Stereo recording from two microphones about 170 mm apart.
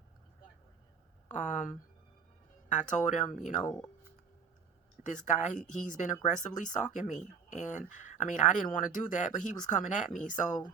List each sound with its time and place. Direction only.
1.3 s speech: 50° left (ahead or behind)
3.6 s speech: 10° left (ahead or behind)
5.0 s speech: 45° left (ahead or behind)